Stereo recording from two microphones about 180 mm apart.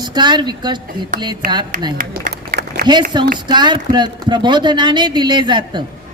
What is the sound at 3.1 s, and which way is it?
A woman's voice, 25° right (ahead or behind).